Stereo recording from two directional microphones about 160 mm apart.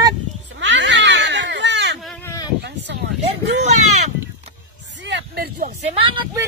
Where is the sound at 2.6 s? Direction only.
90° right.